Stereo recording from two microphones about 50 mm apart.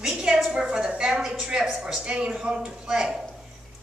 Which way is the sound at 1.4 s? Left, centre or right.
Centre.